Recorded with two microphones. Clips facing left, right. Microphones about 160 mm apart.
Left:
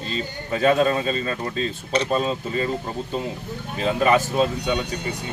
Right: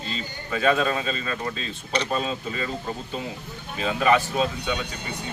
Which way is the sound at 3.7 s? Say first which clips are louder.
Left 2 dB; 40° left (ahead or behind).